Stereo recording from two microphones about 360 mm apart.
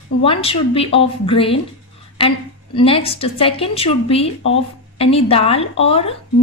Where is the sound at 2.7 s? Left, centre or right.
Centre.